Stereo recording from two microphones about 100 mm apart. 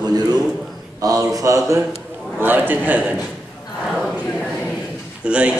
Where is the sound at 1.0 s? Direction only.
35° right (ahead or behind).